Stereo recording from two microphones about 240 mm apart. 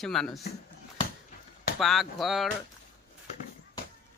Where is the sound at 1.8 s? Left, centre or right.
Centre.